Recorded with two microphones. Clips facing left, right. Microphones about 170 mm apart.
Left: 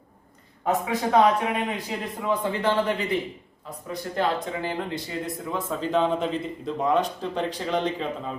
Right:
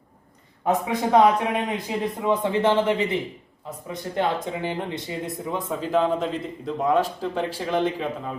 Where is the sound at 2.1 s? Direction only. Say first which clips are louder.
Right 3 dB; 20° right (ahead or behind).